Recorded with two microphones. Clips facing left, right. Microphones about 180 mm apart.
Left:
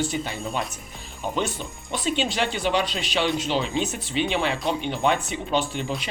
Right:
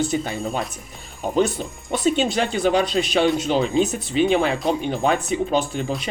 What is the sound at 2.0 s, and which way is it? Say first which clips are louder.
Speech: right 5 dB; 45° right (ahead or behind).